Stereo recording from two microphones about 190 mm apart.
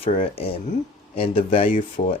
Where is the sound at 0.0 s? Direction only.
30° left (ahead or behind).